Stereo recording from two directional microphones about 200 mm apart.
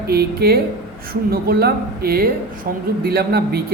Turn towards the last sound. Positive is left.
turn(degrees=-50)  # may be behind; listen again after turning